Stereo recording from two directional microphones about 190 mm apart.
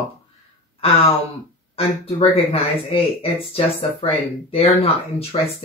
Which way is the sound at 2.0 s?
30° left (ahead or behind).